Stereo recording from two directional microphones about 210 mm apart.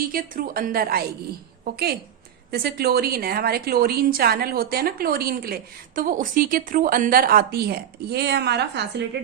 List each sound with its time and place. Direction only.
0.1 s a woman's voice: 40° right (ahead or behind)